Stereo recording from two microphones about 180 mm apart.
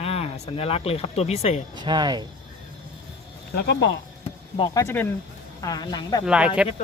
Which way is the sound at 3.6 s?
70° left (ahead or behind).